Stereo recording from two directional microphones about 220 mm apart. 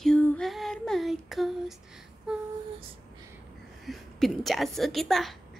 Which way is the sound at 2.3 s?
5° right (ahead or behind).